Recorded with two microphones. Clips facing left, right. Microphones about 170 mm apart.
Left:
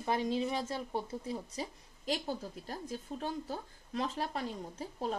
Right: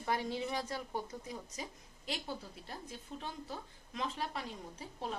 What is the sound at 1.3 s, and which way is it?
A woman's voice, 35° left (ahead or behind).